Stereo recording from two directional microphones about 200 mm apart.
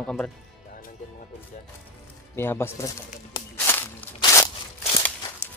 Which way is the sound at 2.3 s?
10° left (ahead or behind).